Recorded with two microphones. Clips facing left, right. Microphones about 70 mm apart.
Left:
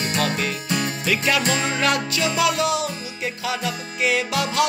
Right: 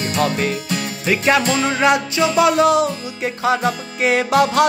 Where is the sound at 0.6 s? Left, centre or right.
Left.